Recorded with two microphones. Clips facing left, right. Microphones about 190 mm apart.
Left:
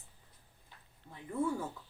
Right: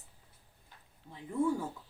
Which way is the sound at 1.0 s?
10° right (ahead or behind).